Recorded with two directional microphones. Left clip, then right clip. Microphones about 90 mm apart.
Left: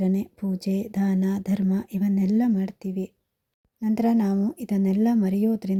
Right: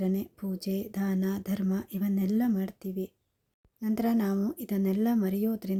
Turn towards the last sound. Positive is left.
turn(degrees=25)  # may be behind; listen again after turning